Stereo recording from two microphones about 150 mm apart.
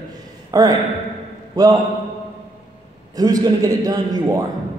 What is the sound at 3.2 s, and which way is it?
A man's voice, 25° right (ahead or behind).